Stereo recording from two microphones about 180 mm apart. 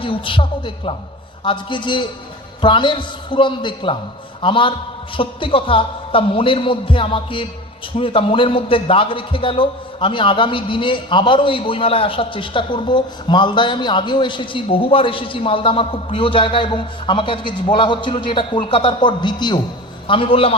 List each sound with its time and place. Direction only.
0.0 s a man's voice: 30° left (ahead or behind)